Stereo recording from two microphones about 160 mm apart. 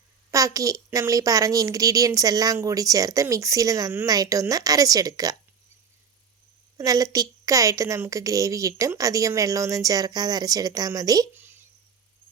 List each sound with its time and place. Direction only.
0.3 s a woman's voice: 20° right (ahead or behind)
6.7 s a woman's voice: 20° right (ahead or behind)